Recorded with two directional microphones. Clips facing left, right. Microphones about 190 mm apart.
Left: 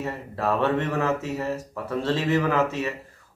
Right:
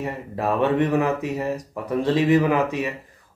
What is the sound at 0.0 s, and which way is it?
Speech, 15° right (ahead or behind).